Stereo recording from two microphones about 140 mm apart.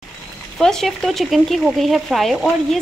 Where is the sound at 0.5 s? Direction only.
5° left (ahead or behind).